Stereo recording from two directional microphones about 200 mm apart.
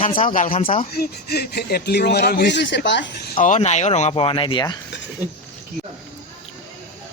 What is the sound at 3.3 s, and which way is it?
Speech, 40° left (ahead or behind).